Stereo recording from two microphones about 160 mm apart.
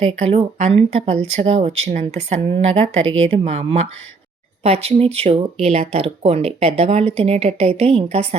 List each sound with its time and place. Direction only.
0.0 s speech: 35° right (ahead or behind)